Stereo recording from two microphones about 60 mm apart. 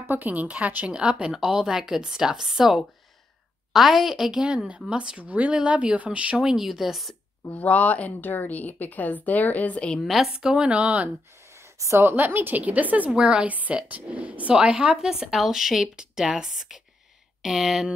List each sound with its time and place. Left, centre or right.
0.1 s a woman's voice: right; by 4.3 s centre
4.3 s speech: centre
6.3 s speech: centre
7.5 s speech: left
10.0 s speech: centre
10.3 s a woman's voice: centre
11.5 s a sound: right
12.1 s speech: right
13.1 s a woman's voice: centre